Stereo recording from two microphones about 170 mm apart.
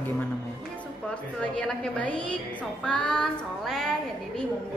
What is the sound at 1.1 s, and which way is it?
Speech, 5° left (ahead or behind).